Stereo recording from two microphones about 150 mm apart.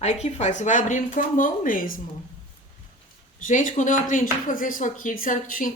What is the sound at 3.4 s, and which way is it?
Speech, 60° left (ahead or behind).